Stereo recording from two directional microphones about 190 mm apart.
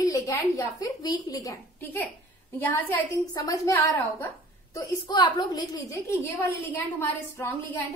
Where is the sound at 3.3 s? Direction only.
20° left (ahead or behind).